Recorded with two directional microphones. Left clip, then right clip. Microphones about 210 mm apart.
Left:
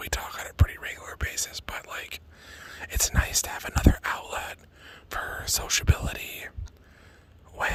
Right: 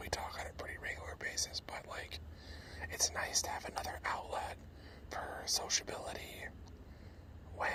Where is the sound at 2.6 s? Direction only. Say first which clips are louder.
Left 8 dB; 45° left (ahead or behind).